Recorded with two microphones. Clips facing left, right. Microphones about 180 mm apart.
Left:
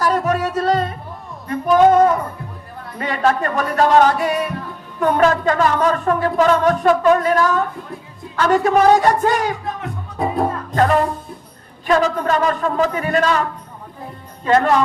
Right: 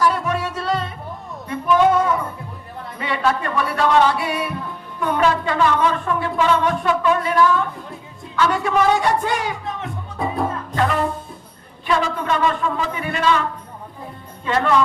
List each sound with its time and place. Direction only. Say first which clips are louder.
0.0 s music: left 2 dB; 45° left (ahead or behind)
11.9 s music: left 4 dB; 45° left (ahead or behind)
14.4 s music: left 4 dB; 45° left (ahead or behind)